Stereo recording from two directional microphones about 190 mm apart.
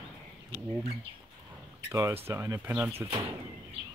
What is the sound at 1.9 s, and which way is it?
Speech, 15° right (ahead or behind).